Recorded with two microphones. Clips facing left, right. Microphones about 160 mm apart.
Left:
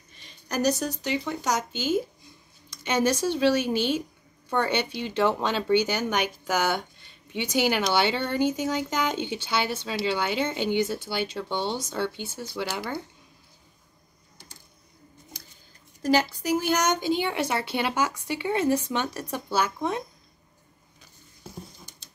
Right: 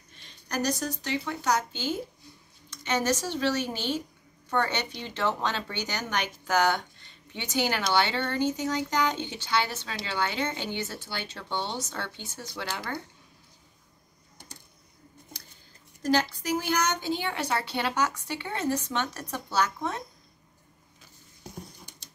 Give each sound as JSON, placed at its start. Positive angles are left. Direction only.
{"t": 0.2, "sound": "speech", "side_deg": 10}
{"t": 16.0, "sound": "speech", "side_deg": 10}